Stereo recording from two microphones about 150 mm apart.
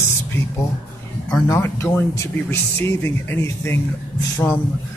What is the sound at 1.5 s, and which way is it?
Speech, 15° left (ahead or behind).